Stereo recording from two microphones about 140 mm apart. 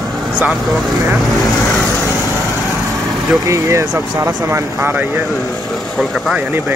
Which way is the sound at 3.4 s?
25° right (ahead or behind).